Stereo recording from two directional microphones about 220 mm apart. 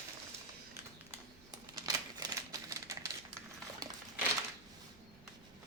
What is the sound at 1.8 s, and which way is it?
Typewriter, 15° right (ahead or behind).